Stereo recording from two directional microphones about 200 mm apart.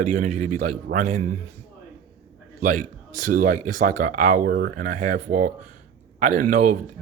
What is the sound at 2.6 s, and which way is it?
A man's voice, 45° right (ahead or behind).